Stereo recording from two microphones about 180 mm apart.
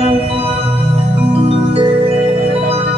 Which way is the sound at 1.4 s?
35° right (ahead or behind).